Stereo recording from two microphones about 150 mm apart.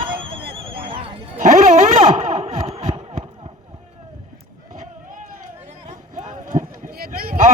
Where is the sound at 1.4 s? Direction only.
55° right (ahead or behind); by 3.2 s 40° right (ahead or behind).